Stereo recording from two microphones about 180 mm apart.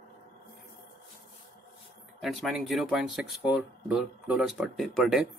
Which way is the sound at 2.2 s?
Centre (ahead or behind).